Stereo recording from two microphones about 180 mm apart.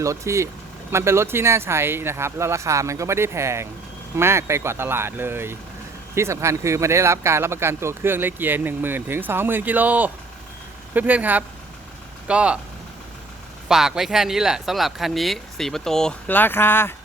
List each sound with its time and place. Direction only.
0.0 s speech: 15° right (ahead or behind)
13.7 s speech: centre (ahead or behind)